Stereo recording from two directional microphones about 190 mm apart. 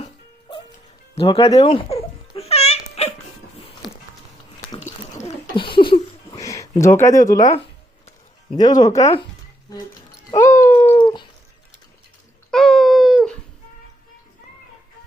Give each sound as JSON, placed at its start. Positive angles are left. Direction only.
{"t": 1.1, "sound": "speech", "side_deg": 30}
{"t": 1.5, "sound": "babbling", "side_deg": 30}
{"t": 5.5, "sound": "a sound", "side_deg": 25}
{"t": 8.5, "sound": "speech", "side_deg": 20}
{"t": 10.3, "sound": "cat", "side_deg": 15}
{"t": 10.9, "sound": "dog", "side_deg": 25}
{"t": 12.5, "sound": "a sound", "side_deg": 0}